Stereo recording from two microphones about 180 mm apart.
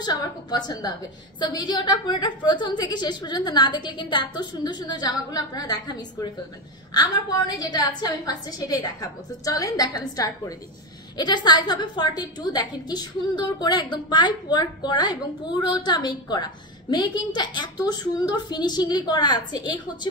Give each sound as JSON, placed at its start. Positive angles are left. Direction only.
{"t": 0.0, "sound": "a woman's voice", "side_deg": 25}